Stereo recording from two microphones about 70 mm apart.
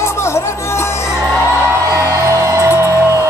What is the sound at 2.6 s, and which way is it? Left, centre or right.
Music, right.